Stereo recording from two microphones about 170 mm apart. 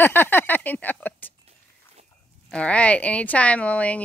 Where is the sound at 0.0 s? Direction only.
10° left (ahead or behind).